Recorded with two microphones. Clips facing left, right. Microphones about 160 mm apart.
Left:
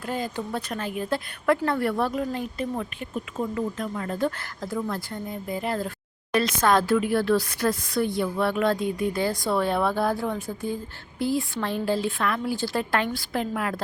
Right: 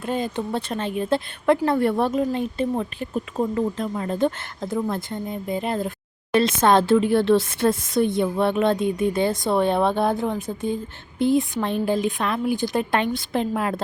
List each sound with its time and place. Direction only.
0.0 s a woman's voice: 20° right (ahead or behind)